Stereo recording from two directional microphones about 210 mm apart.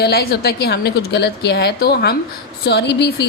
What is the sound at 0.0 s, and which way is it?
A woman's voice, 50° left (ahead or behind).